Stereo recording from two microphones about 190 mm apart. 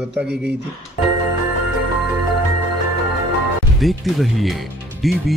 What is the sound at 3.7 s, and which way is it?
A man's voice, centre (ahead or behind).